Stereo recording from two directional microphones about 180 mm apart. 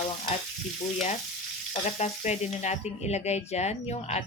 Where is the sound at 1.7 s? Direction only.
40° left (ahead or behind).